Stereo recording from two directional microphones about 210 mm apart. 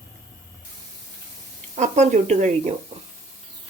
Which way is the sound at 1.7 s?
35° right (ahead or behind).